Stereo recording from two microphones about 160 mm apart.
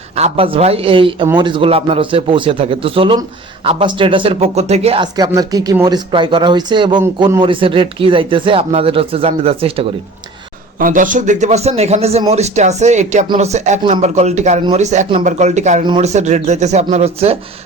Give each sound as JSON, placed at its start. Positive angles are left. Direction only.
{"t": 0.2, "sound": "speech", "side_deg": -35}
{"t": 5.1, "sound": "speech", "side_deg": -25}
{"t": 10.8, "sound": "speech", "side_deg": -55}